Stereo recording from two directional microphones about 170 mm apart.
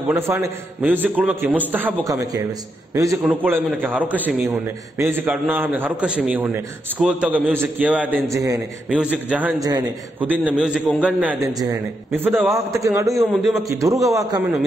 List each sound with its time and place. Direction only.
0.1 s a man's voice: 15° right (ahead or behind)
8.8 s a man's voice: 5° right (ahead or behind)
9.6 s a man's voice: 25° right (ahead or behind)
10.2 s a man's voice: 10° right (ahead or behind)
12.4 s a man's voice: 15° right (ahead or behind)
13.3 s a man's voice: centre (ahead or behind)
13.6 s a man's voice: 20° right (ahead or behind)